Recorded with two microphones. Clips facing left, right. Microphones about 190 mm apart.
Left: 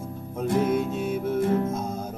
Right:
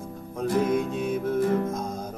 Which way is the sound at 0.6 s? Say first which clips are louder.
Even; 10° left (ahead or behind).